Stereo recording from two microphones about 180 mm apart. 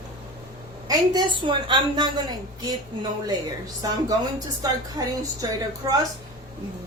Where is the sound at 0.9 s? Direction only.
25° right (ahead or behind).